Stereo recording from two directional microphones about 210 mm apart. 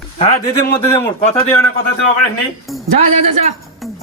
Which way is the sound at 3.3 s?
30° right (ahead or behind).